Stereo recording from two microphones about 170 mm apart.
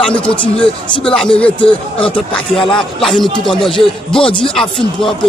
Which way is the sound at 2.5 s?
5° left (ahead or behind).